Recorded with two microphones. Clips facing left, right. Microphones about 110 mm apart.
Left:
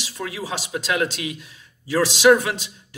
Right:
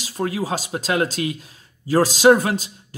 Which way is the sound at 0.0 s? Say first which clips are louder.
Right 6 dB; 40° right (ahead or behind).